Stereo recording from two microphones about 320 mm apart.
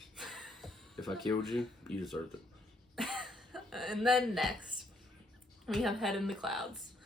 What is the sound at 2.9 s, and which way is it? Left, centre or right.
Throat clearing, centre.